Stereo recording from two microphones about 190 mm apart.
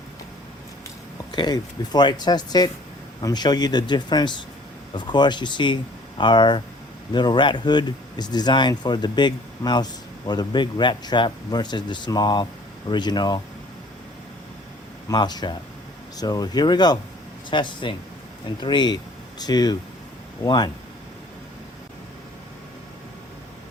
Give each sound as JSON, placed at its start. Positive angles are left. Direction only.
{"t": 1.3, "sound": "speech", "side_deg": 20}
{"t": 15.1, "sound": "speech", "side_deg": 20}